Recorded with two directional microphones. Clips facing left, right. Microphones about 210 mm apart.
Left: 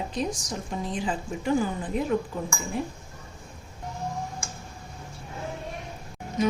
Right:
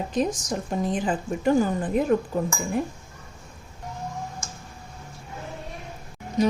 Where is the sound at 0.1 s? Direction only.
50° right (ahead or behind).